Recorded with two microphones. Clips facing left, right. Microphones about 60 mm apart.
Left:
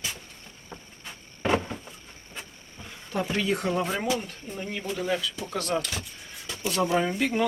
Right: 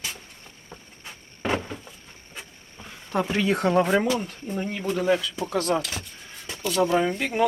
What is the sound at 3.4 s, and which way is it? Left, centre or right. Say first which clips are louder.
Speech: right 8 dB; right.